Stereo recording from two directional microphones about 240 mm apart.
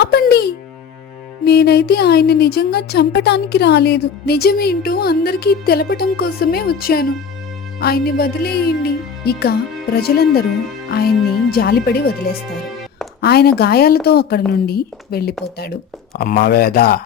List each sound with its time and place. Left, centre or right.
0.0 s speech: left
1.5 s a woman's voice: left
11.5 s a woman's voice: left
13.2 s a woman's voice: left